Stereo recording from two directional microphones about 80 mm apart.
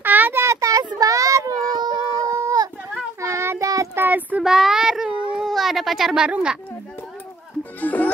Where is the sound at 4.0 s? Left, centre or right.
Right.